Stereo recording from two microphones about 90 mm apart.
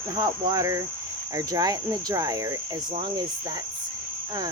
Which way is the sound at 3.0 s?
55° right (ahead or behind).